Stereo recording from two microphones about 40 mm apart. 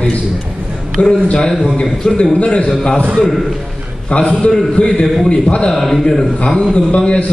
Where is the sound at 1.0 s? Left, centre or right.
Left.